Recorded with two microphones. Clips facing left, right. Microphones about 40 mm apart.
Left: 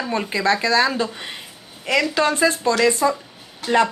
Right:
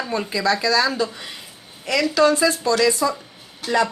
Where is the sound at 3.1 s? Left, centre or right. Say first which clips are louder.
Left 4 dB; left.